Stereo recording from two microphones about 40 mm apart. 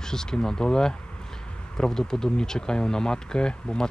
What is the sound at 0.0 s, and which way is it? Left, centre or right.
Speech, centre.